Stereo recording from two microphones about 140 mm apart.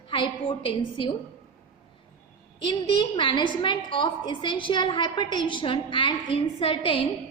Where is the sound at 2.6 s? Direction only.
35° left (ahead or behind).